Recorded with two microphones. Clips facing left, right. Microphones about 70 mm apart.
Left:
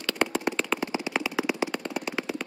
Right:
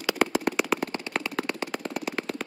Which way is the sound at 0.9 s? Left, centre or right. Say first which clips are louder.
Left 2 dB; centre.